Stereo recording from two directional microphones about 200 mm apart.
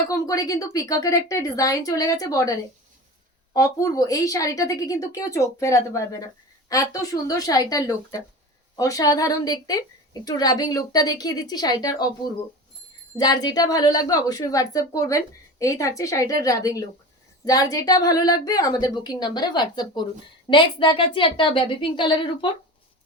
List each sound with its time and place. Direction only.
0.1 s a woman's voice: 15° left (ahead or behind)
3.5 s a woman's voice: 15° left (ahead or behind)
13.1 s a woman's voice: 20° left (ahead or behind)